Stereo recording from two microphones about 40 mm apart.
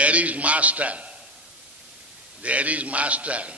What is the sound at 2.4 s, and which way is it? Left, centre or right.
A man's voice, right.